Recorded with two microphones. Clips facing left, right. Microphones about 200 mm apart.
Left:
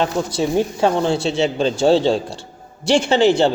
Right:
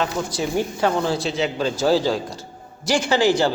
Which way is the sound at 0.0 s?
25° left (ahead or behind).